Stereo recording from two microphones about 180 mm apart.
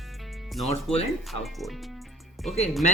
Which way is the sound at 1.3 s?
Centre (ahead or behind).